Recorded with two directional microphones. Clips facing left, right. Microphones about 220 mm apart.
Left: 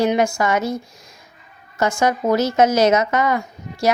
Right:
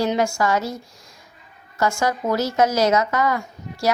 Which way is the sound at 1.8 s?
20° left (ahead or behind).